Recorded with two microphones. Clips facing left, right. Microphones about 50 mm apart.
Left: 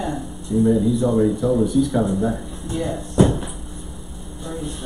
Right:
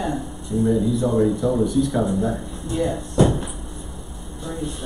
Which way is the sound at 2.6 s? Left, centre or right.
Centre.